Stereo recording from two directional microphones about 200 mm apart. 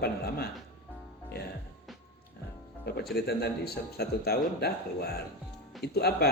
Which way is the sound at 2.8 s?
50° left (ahead or behind).